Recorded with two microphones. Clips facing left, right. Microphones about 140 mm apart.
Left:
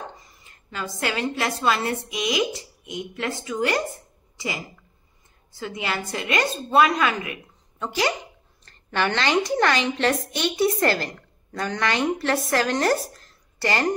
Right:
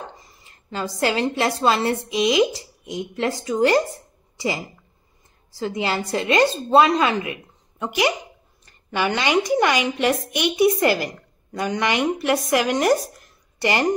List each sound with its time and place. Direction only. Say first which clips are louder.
0.7 s a woman's voice: right 5 dB; 30° right (ahead or behind)
5.5 s a woman's voice: right 5 dB; 35° right (ahead or behind)
7.8 s a woman's voice: right 3 dB; 15° right (ahead or behind)